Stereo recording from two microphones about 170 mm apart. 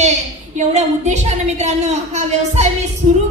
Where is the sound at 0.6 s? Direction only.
40° right (ahead or behind).